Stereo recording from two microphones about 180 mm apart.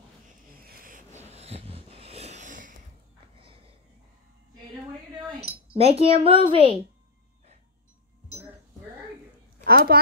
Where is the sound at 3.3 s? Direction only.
30° right (ahead or behind).